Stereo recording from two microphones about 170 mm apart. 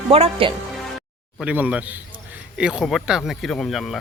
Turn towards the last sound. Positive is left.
turn(degrees=0)  # may be behind; listen again after turning